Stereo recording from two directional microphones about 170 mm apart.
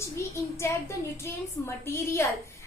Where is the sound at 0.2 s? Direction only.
15° left (ahead or behind).